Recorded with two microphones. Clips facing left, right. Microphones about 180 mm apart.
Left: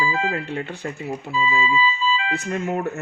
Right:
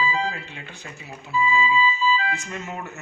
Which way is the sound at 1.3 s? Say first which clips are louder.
Right 1 dB; 20° left (ahead or behind).